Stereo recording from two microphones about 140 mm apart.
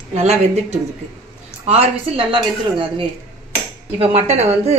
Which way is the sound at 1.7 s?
40° right (ahead or behind).